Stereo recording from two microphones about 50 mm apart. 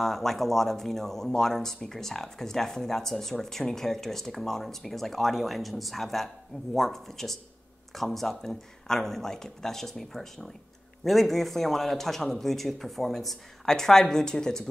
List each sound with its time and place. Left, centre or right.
0.0 s speech: centre